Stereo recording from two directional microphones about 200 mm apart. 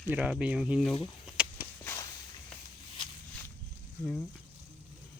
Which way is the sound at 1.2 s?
5° right (ahead or behind).